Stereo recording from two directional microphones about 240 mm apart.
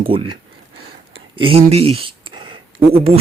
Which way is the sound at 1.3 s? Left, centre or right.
Right.